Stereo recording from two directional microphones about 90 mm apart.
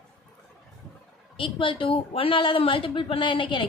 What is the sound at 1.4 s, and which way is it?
A woman's voice, 70° left (ahead or behind).